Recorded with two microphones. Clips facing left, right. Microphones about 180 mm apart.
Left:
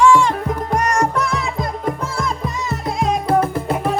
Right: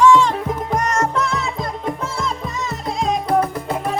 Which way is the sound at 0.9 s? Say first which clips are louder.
Left 1 dB; 15° left (ahead or behind).